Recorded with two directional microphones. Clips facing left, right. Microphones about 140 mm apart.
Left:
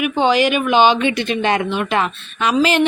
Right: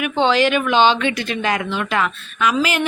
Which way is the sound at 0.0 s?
10° left (ahead or behind).